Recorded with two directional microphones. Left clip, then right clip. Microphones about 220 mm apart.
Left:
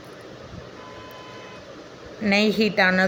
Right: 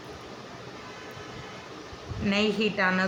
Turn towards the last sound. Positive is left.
turn(degrees=25)  # may be behind; listen again after turning